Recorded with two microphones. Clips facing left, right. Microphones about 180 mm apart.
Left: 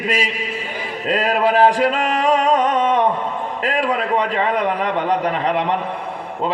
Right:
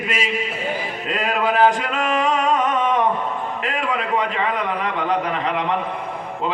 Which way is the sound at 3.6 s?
35° left (ahead or behind).